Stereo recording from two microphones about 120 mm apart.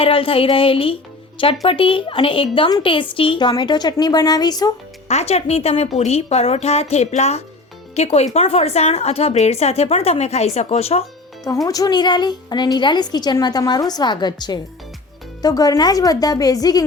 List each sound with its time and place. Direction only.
0.0 s a woman's voice: 50° left (ahead or behind); by 4.7 s 35° left (ahead or behind)
5.0 s a woman's voice: 65° left (ahead or behind)
11.4 s a woman's voice: 30° left (ahead or behind)